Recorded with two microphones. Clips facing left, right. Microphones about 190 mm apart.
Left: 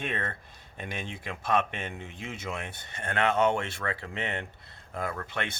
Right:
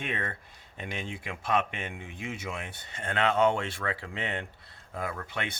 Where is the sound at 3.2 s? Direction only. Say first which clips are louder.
Even; 20° left (ahead or behind).